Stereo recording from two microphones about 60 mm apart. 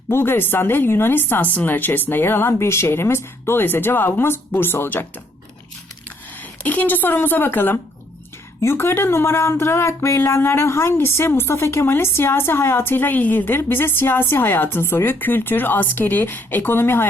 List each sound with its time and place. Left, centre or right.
0.1 s speech: left
6.7 s speech: left